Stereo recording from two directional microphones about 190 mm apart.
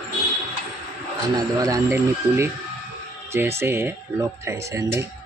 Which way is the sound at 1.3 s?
20° right (ahead or behind).